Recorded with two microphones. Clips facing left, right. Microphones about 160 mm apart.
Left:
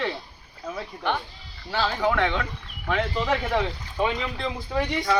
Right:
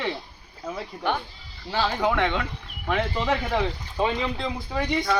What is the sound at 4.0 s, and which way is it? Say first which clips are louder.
Speech: right 1 dB; 20° right (ahead or behind).